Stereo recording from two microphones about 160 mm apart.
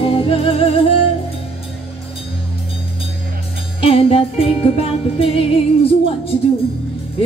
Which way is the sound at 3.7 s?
35° left (ahead or behind).